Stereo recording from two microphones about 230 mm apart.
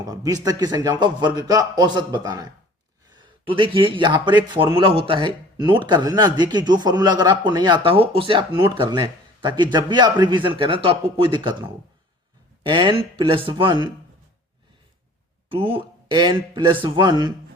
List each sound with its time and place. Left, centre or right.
0.0 s a man's voice: centre
12.6 s speech: right
15.4 s speech: right